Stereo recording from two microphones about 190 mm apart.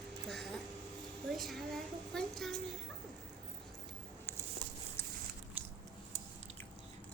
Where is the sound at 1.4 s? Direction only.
Centre (ahead or behind).